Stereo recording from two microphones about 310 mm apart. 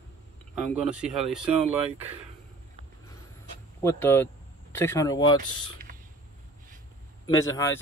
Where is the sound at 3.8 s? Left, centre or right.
Centre.